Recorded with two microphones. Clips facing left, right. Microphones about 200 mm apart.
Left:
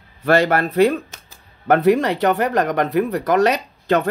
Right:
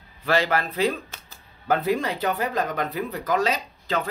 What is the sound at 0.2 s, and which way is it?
Speech, 55° left (ahead or behind).